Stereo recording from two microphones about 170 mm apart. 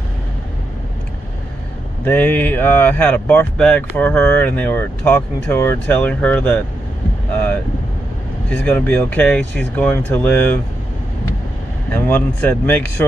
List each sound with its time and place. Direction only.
2.0 s speech: 10° left (ahead or behind)
8.5 s speech: 10° left (ahead or behind)
11.9 s speech: 10° left (ahead or behind)